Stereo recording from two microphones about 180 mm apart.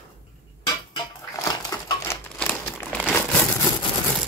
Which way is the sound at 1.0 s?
20° left (ahead or behind).